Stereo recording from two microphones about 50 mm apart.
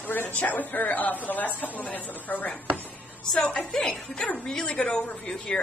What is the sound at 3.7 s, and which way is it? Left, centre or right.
Speech, centre.